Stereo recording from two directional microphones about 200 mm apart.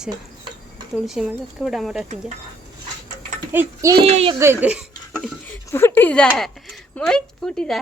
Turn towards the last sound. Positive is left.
turn(degrees=5)  # may be behind; listen again after turning